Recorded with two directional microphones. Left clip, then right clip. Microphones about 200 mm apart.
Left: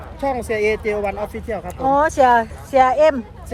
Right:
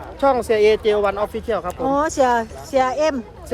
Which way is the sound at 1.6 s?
10° right (ahead or behind).